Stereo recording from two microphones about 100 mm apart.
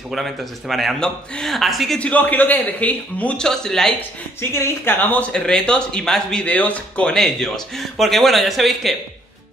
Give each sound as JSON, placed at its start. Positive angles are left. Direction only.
{"t": 0.1, "sound": "speech", "side_deg": 0}
{"t": 2.0, "sound": "a man's voice", "side_deg": 15}
{"t": 4.4, "sound": "speech", "side_deg": 25}
{"t": 5.3, "sound": "speech", "side_deg": 5}